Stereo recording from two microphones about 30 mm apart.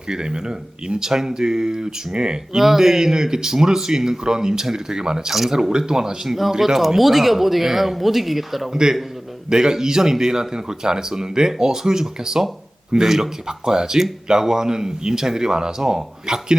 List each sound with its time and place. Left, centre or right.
0.1 s speech: right
2.6 s speech: centre
6.2 s speech: centre
8.7 s speech: right